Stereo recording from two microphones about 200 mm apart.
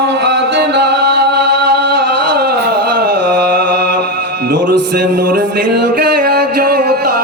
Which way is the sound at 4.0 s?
50° right (ahead or behind).